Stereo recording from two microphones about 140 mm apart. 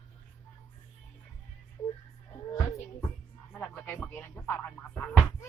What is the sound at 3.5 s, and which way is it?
Music, 10° left (ahead or behind).